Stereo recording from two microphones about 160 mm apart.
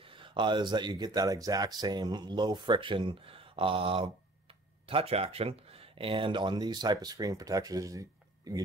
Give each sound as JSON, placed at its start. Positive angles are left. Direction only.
{"t": 0.0, "sound": "speech", "side_deg": -30}